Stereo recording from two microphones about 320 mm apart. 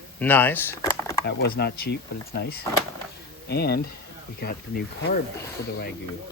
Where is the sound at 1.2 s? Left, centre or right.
Left.